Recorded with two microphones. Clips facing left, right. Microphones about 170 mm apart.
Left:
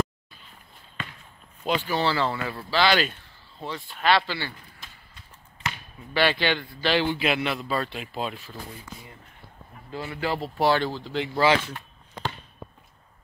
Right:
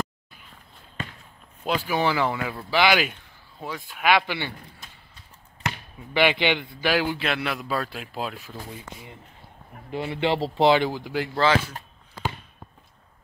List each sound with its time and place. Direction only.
1.9 s a man's voice: 15° right (ahead or behind)
6.1 s a man's voice: 15° right (ahead or behind); by 8.4 s centre (ahead or behind)
9.8 s speech: 20° right (ahead or behind)
11.3 s speech: 15° left (ahead or behind)